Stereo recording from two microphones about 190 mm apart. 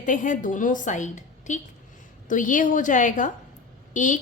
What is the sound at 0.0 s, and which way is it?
A woman's voice, 40° left (ahead or behind).